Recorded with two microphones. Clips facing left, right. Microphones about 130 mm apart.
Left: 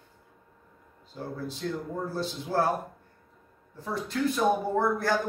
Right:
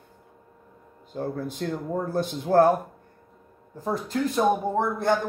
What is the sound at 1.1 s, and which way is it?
Speech, 50° right (ahead or behind).